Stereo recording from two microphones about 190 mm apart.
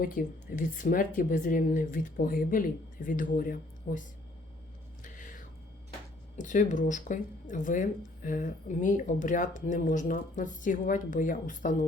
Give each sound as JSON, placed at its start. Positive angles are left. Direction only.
{"t": 0.0, "sound": "speech", "side_deg": 45}
{"t": 5.0, "sound": "music", "side_deg": 45}
{"t": 6.3, "sound": "speech", "side_deg": 40}